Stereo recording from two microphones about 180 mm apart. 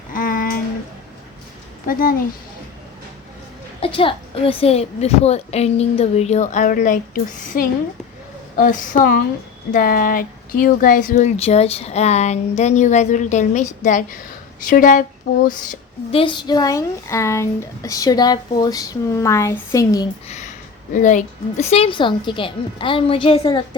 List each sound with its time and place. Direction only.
0.1 s a sound: 50° left (ahead or behind)
1.9 s a woman's voice: 50° left (ahead or behind)
3.8 s a woman's voice: 30° left (ahead or behind); by 15.4 s 50° left (ahead or behind)
16.1 s speech: 25° left (ahead or behind)
20.2 s speech: 40° left (ahead or behind)